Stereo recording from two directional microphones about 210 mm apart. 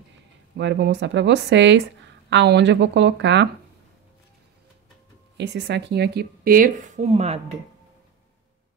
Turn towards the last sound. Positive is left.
turn(degrees=-30)  # may be behind; listen again after turning